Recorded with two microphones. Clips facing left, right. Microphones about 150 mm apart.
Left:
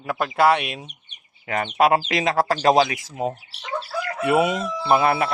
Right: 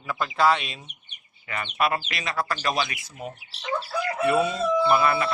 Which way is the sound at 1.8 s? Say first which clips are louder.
Left 8 dB; 90° left.